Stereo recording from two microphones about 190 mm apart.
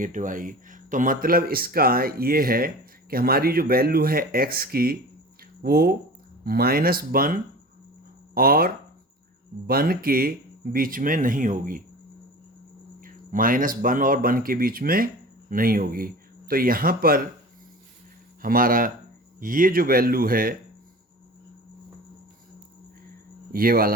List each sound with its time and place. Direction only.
0.0 s speech: 45° right (ahead or behind)
8.4 s speech: 50° right (ahead or behind)
13.0 s speech: 45° right (ahead or behind)
18.4 s speech: 50° right (ahead or behind)
23.5 s speech: 50° right (ahead or behind)